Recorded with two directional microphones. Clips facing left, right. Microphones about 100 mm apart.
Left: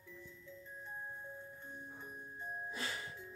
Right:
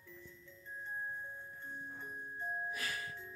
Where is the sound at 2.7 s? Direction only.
25° left (ahead or behind).